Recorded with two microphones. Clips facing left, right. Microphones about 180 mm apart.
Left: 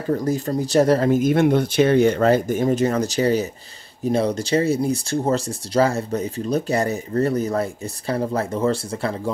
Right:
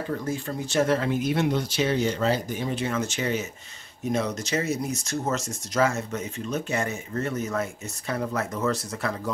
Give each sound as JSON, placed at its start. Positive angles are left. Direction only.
{"t": 0.1, "sound": "speech", "side_deg": 40}